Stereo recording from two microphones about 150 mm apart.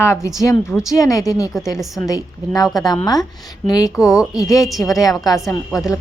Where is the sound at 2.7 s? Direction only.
25° left (ahead or behind).